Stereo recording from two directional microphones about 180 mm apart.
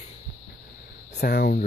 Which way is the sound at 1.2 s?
60° left (ahead or behind).